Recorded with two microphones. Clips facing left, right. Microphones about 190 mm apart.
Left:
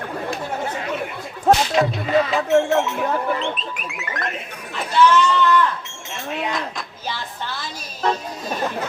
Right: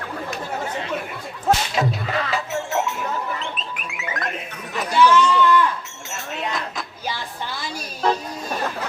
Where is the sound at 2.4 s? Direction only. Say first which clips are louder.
Left 10 dB; 60° left (ahead or behind).